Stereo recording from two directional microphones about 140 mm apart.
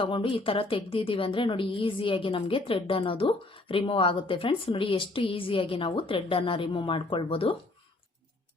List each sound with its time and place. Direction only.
0.0 s a woman's voice: 40° left (ahead or behind)